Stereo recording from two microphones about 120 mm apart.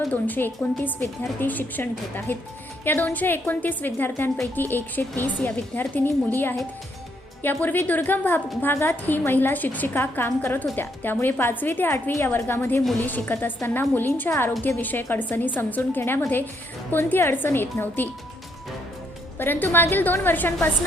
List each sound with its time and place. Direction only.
0.1 s a woman's voice: 15° left (ahead or behind)
19.4 s a woman's voice: 15° left (ahead or behind)